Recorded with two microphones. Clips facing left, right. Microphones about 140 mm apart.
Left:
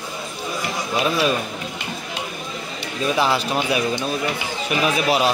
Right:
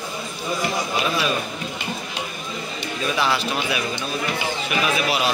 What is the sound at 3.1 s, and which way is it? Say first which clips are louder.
Speech: left 3 dB; 35° left (ahead or behind).